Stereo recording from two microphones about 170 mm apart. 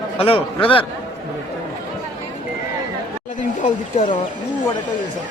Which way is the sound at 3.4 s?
45° left (ahead or behind).